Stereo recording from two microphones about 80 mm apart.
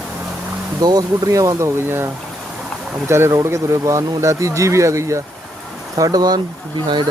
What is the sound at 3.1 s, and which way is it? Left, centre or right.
Speech, right.